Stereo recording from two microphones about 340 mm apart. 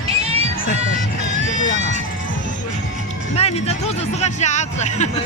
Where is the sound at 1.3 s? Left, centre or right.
Right.